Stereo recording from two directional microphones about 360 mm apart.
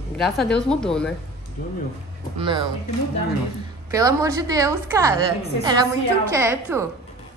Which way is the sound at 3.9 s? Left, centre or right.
Centre.